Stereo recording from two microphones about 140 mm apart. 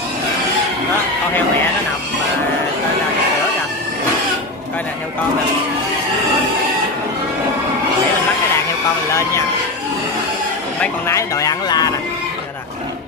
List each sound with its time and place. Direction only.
11.1 s speech: 20° left (ahead or behind)